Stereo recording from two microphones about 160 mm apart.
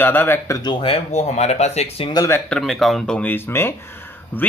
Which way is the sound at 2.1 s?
25° left (ahead or behind).